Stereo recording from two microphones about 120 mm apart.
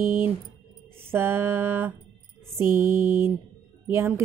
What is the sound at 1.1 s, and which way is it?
A woman's voice, 20° right (ahead or behind).